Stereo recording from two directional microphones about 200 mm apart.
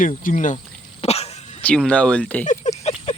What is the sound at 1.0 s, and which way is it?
Cough, 30° left (ahead or behind).